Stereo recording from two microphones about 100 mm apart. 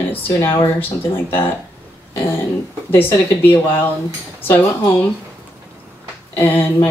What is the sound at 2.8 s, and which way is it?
Speech, 20° left (ahead or behind).